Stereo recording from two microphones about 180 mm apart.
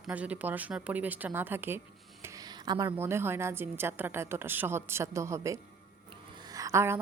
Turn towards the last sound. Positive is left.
turn(degrees=-15)  # may be behind; listen again after turning